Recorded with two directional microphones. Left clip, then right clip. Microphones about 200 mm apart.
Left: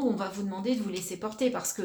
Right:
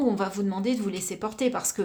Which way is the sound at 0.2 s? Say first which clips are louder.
Right 5 dB; 45° right (ahead or behind).